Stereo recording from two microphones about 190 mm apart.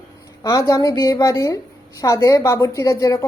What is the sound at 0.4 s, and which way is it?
A woman's voice, 20° left (ahead or behind).